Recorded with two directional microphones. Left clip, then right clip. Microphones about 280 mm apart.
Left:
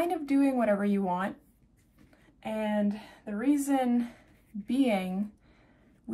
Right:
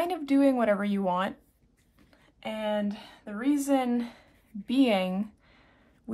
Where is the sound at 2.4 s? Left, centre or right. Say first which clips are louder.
Right 1 dB; centre.